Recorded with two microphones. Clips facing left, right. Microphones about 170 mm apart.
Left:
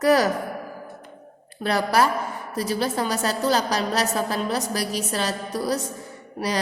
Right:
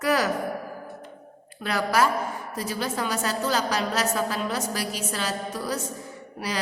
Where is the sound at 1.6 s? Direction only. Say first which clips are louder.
Left 2 dB; 35° left (ahead or behind).